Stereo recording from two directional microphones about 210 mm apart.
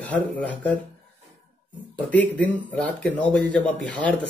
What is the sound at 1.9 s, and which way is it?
Speech, 5° left (ahead or behind).